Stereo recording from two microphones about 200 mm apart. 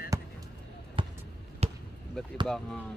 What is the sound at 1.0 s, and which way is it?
Basketball bounce, 25° right (ahead or behind).